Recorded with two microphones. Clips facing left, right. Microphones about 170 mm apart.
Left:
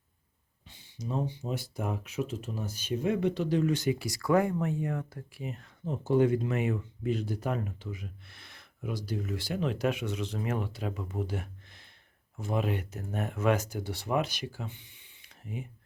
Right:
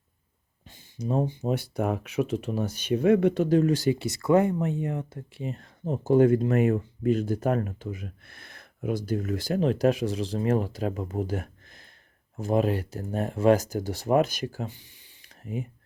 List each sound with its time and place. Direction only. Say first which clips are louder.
0.7 s speech: right 7 dB; 50° right (ahead or behind)